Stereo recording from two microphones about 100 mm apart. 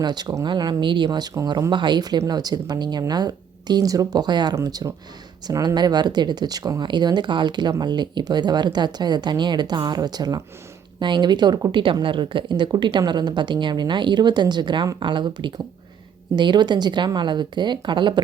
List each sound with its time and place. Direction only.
0.0 s speech: 45° right (ahead or behind)